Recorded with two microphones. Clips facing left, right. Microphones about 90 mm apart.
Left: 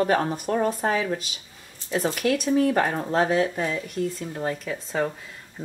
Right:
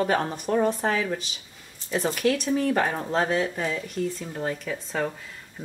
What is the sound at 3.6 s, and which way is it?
Speech, centre (ahead or behind).